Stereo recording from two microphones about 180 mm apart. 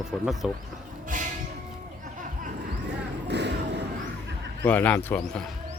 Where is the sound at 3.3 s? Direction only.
70° right (ahead or behind).